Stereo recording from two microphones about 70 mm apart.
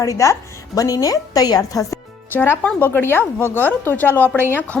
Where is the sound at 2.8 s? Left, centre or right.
Left.